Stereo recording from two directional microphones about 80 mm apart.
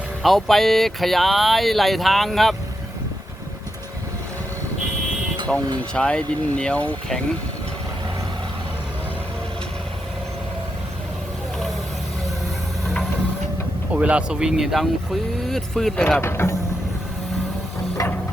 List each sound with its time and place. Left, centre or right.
0.2 s speech: centre
5.5 s speech: centre
13.9 s speech: centre
16.0 s speech: centre
16.2 s speech: left